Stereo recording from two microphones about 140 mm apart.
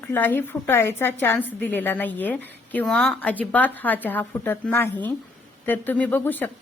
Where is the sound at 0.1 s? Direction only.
15° left (ahead or behind).